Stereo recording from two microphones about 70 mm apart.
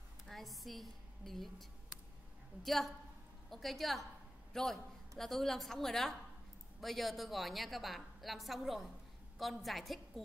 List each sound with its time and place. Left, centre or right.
0.3 s a woman's voice: centre